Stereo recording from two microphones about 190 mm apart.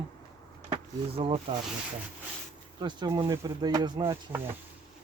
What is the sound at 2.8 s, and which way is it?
Speech, 25° right (ahead or behind).